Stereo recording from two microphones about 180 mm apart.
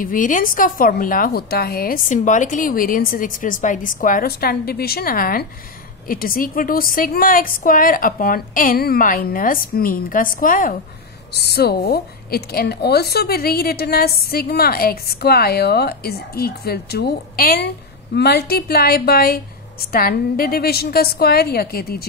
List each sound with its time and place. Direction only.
0.0 s a woman's voice: 50° left (ahead or behind)
11.3 s a woman's voice: 65° left (ahead or behind)